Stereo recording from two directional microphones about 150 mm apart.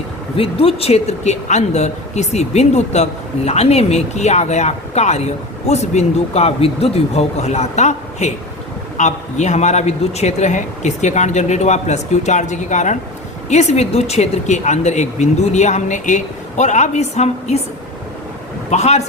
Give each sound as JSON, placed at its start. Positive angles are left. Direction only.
{"t": 0.3, "sound": "speech", "side_deg": 40}
{"t": 18.7, "sound": "speech", "side_deg": 50}